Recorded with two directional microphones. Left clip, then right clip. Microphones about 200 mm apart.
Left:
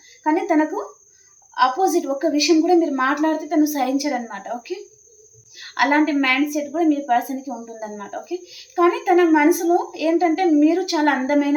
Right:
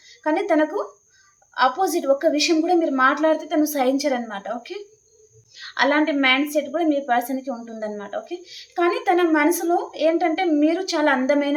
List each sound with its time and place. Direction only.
0.2 s a woman's voice: 25° right (ahead or behind)